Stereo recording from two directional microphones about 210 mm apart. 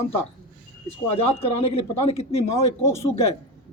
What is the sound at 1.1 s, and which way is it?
Speech, 30° left (ahead or behind).